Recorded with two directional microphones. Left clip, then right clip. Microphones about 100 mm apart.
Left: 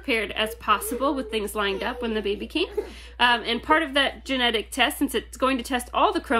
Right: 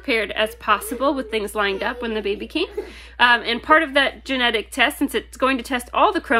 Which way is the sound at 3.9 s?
35° right (ahead or behind).